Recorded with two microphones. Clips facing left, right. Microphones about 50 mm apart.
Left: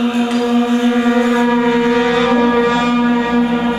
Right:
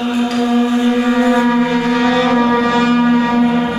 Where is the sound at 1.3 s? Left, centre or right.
Centre.